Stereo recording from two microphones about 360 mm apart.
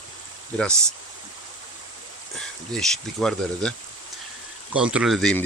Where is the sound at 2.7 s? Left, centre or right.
Centre.